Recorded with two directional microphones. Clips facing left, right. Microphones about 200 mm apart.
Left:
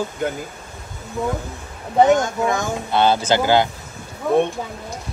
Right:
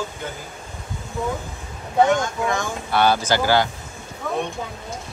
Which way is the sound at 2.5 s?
20° left (ahead or behind).